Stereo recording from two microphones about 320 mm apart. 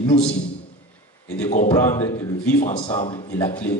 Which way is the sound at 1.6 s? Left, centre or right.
Centre.